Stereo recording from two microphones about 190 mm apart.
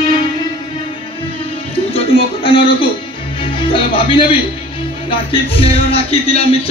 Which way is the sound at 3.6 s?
25° left (ahead or behind).